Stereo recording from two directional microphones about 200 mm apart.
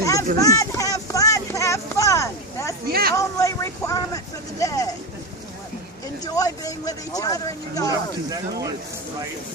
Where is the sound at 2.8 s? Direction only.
50° right (ahead or behind).